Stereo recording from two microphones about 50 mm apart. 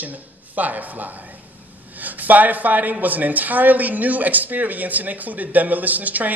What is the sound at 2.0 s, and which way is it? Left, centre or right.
A woman's voice, right.